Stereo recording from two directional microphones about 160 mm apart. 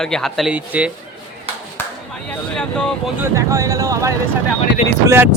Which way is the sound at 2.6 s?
5° left (ahead or behind).